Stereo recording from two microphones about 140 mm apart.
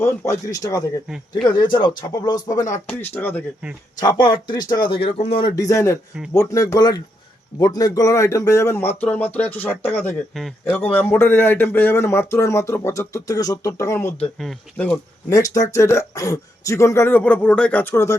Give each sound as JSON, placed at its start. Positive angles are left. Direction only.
{"t": 0.0, "sound": "speech", "side_deg": 20}
{"t": 2.7, "sound": "speech", "side_deg": 15}
{"t": 4.0, "sound": "speech", "side_deg": 35}
{"t": 4.9, "sound": "speech", "side_deg": 45}
{"t": 5.5, "sound": "speech", "side_deg": 25}
{"t": 10.3, "sound": "a man's voice", "side_deg": 0}
{"t": 10.8, "sound": "speech", "side_deg": 15}
{"t": 15.3, "sound": "speech", "side_deg": 25}